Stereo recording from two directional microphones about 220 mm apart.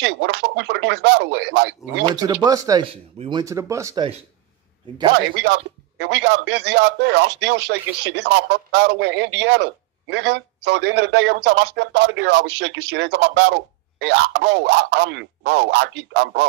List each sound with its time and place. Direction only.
0.0 s a man's voice: 50° right (ahead or behind)
2.2 s speech: 15° right (ahead or behind)
5.1 s a man's voice: 50° right (ahead or behind)